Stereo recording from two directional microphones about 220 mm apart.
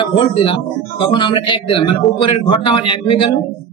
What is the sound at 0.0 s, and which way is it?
A man's voice, 25° left (ahead or behind).